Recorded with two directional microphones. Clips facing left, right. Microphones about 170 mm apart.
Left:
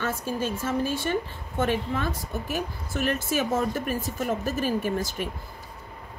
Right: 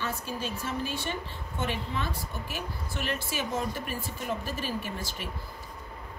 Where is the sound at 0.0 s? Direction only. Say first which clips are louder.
Left 5 dB; 50° left (ahead or behind).